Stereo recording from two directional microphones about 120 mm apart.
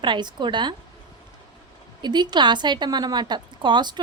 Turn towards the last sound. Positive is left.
turn(degrees=-40)  # may be behind; listen again after turning